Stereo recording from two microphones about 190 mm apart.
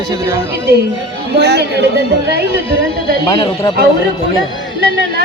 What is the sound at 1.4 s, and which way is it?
Speech, 60° right (ahead or behind).